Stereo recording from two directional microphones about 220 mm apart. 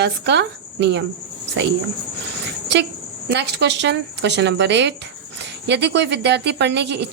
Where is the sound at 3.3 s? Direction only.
50° right (ahead or behind).